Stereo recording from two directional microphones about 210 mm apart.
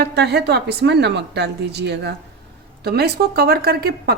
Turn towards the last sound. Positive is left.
turn(degrees=-45)  # may be behind; listen again after turning